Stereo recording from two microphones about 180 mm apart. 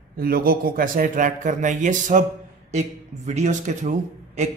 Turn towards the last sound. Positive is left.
turn(degrees=-40)  # may be behind; listen again after turning